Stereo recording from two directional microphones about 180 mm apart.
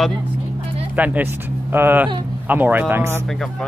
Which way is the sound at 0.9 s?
10° right (ahead or behind).